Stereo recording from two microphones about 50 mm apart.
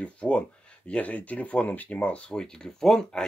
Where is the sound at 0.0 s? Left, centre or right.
Left.